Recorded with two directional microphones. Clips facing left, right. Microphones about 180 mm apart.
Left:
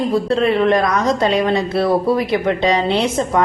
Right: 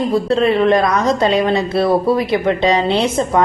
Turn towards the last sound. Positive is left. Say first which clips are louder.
# right 2 dB
turn(degrees=-30)  # may be behind; listen again after turning